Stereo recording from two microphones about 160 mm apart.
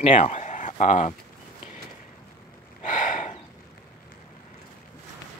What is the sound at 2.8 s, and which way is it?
Snort, 50° left (ahead or behind).